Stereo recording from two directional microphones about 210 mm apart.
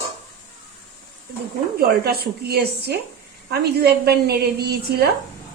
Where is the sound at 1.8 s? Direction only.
50° right (ahead or behind).